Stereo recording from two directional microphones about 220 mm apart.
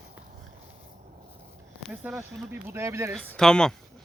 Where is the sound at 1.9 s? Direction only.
5° right (ahead or behind).